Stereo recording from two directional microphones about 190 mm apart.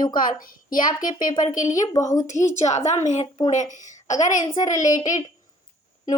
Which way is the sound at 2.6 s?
40° left (ahead or behind).